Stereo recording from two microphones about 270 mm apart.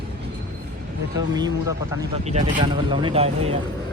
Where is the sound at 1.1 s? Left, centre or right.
Centre.